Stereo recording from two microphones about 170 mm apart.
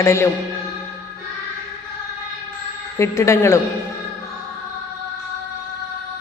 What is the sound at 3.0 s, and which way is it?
Speech, 15° left (ahead or behind).